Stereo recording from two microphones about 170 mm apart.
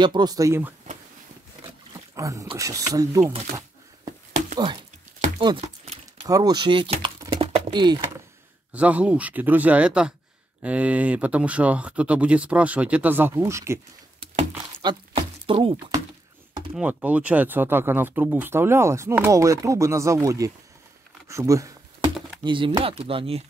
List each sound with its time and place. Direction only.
0.0 s speech: 25° right (ahead or behind)
1.7 s roaring cats: 20° right (ahead or behind)
2.5 s speech: 20° right (ahead or behind)
6.2 s speech: 20° right (ahead or behind)
8.7 s speech: 10° right (ahead or behind)
14.8 s a sound: 30° right (ahead or behind)
16.7 s speech: 10° right (ahead or behind)
21.3 s computer keyboard: 20° right (ahead or behind)
22.4 s speech: 30° right (ahead or behind)